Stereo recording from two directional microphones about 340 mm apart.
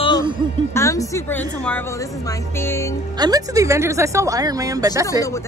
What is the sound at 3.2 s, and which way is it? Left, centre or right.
A woman's voice, centre.